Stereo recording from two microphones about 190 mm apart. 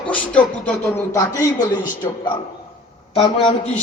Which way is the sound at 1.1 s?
20° left (ahead or behind).